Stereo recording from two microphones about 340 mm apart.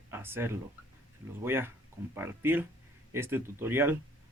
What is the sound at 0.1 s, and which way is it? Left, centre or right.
Speech, centre.